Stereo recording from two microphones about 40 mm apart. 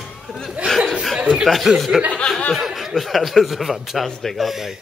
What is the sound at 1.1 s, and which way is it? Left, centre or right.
Speech, right.